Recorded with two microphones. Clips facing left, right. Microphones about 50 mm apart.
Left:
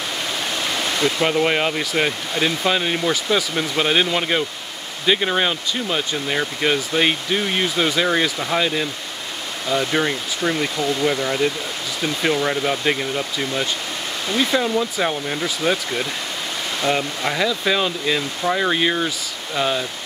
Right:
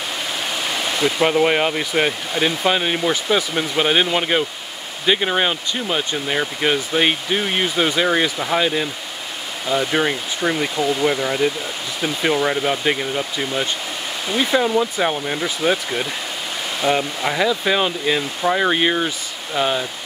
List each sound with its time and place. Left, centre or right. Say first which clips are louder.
0.6 s speech: right 1 dB; centre
17.5 s speech: right 2 dB; centre